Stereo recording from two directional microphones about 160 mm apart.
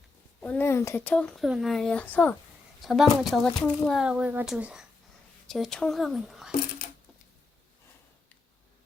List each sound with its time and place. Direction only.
0.3 s speech: 10° left (ahead or behind)
2.8 s a child's voice: centre (ahead or behind)
6.8 s a sound: 65° left (ahead or behind)